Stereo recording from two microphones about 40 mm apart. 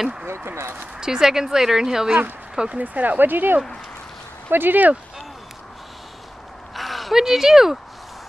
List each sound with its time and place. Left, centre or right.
0.5 s speech: right
0.9 s a woman's voice: centre
2.7 s speech: right
6.7 s a sound: centre
7.2 s a woman's voice: centre